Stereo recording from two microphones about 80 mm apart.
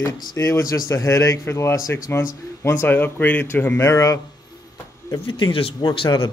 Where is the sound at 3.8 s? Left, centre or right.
Left.